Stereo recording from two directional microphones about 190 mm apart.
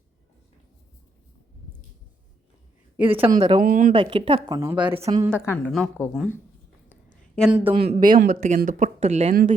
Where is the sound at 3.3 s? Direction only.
40° right (ahead or behind).